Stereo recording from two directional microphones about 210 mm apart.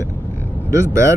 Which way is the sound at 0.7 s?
15° right (ahead or behind).